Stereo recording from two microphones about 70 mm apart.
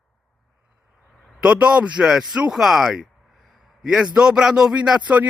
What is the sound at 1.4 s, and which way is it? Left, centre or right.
Speech, centre.